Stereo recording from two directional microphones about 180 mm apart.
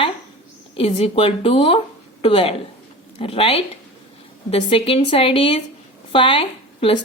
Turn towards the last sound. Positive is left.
turn(degrees=30)  # may be behind; listen again after turning